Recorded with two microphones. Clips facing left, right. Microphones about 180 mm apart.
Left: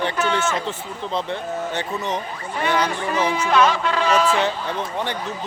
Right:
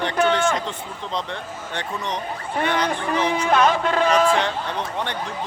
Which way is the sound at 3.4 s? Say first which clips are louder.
Even; 50° right (ahead or behind).